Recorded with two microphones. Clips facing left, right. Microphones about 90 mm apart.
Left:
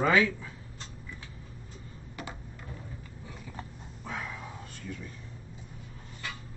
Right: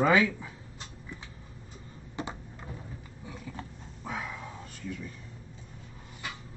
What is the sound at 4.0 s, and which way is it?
Dog, 5° right (ahead or behind).